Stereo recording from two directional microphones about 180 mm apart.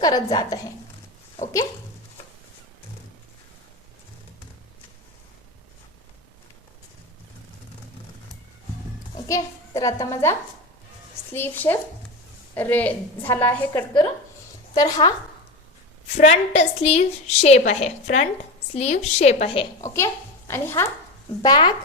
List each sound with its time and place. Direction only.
0.0 s a woman's voice: 20° left (ahead or behind)
9.1 s a child's voice: 20° left (ahead or behind)
11.3 s a woman's voice: 10° left (ahead or behind)
16.2 s a woman's voice: 35° left (ahead or behind)
19.8 s a woman's voice: 15° left (ahead or behind)